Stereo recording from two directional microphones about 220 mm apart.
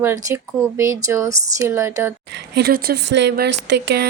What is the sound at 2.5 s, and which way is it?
Speech, 45° right (ahead or behind).